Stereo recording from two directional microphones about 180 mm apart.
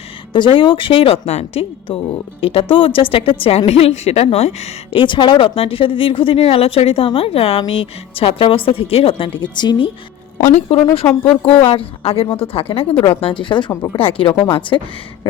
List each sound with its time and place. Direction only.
0.3 s a woman's voice: 25° left (ahead or behind)
10.4 s a woman's voice: 40° left (ahead or behind)